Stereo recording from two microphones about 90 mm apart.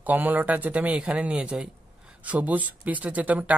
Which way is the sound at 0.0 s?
20° right (ahead or behind).